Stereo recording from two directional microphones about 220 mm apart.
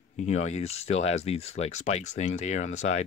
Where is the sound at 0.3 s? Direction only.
30° left (ahead or behind).